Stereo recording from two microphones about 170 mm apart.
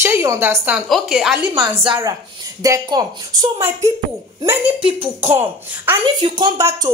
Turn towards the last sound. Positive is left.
turn(degrees=-20)  # may be behind; listen again after turning